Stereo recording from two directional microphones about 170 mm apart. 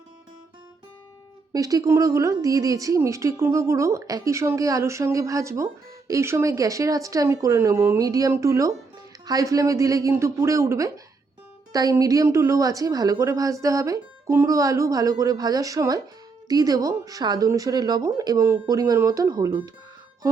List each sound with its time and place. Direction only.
1.5 s a woman's voice: 20° right (ahead or behind)